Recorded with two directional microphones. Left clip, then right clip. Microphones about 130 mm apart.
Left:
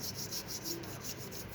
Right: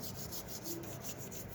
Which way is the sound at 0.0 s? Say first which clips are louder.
Left 5 dB; 40° right (ahead or behind).